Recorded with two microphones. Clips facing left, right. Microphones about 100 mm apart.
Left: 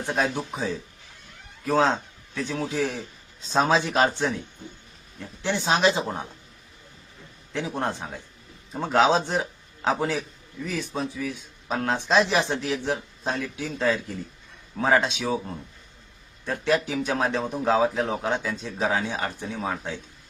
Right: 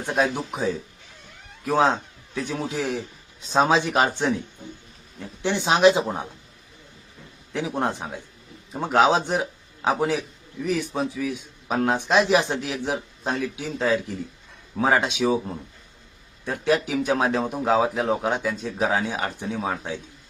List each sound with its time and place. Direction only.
0.0 s a man's voice: 15° right (ahead or behind)
7.5 s a man's voice: 10° right (ahead or behind)